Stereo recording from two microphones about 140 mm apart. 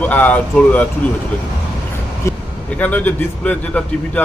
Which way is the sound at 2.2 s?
10° left (ahead or behind).